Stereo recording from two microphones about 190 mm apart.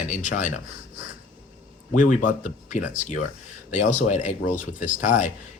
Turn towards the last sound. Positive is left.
turn(degrees=40)  # may be behind; listen again after turning